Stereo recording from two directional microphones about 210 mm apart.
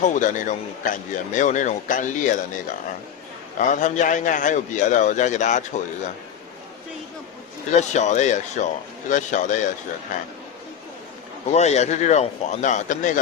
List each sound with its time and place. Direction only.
0.0 s a man's voice: 35° left (ahead or behind)
3.6 s a man's voice: 35° left (ahead or behind)
7.7 s a man's voice: 35° left (ahead or behind)
11.5 s a man's voice: 30° left (ahead or behind)